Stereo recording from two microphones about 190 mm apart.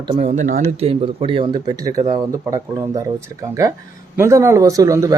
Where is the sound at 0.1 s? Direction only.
35° right (ahead or behind); by 2.0 s 20° right (ahead or behind).